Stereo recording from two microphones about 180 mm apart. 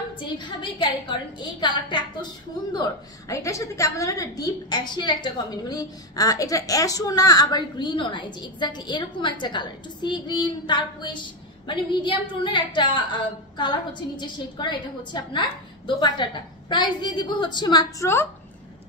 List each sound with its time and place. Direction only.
0.1 s a woman's voice: 25° left (ahead or behind)
3.3 s a woman's voice: 15° left (ahead or behind)